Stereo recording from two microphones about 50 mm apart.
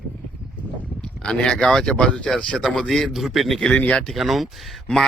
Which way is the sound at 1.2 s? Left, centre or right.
Centre.